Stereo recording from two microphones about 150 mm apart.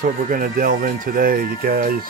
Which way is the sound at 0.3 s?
70° right (ahead or behind).